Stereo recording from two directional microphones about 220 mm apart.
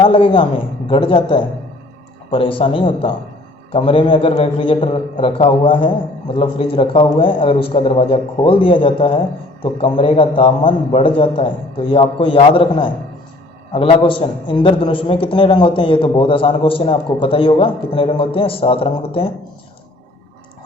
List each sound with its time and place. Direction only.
0.0 s a man's voice: 25° left (ahead or behind)